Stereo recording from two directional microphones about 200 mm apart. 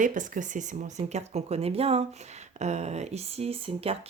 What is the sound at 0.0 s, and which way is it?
Speech, 40° right (ahead or behind).